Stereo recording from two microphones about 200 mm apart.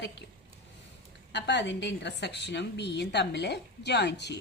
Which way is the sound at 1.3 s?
60° left (ahead or behind).